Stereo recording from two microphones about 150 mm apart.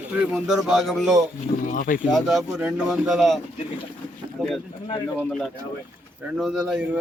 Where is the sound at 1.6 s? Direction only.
60° left (ahead or behind).